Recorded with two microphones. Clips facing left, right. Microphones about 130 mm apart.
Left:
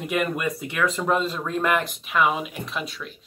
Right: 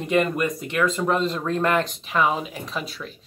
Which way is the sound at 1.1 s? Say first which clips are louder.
Right 1 dB; 5° left (ahead or behind).